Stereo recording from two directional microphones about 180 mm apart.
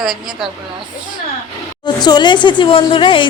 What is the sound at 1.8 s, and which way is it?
Speech, 25° left (ahead or behind).